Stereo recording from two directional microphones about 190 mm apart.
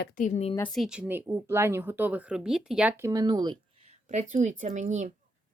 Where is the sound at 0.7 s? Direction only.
5° right (ahead or behind); by 3.5 s 25° right (ahead or behind).